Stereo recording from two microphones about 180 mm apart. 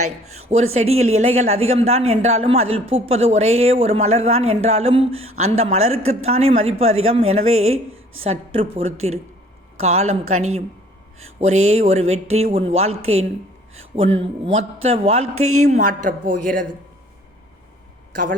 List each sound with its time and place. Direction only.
0.5 s a woman's voice: 35° right (ahead or behind)